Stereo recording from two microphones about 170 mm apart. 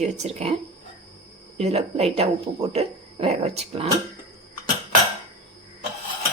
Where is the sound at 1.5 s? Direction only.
35° right (ahead or behind).